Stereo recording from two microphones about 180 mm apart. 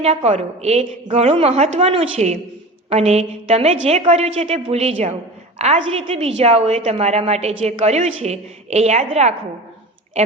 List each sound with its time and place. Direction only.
0.0 s a woman's voice: 35° right (ahead or behind)